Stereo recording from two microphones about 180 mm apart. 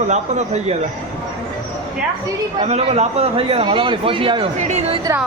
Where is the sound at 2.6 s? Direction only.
35° right (ahead or behind).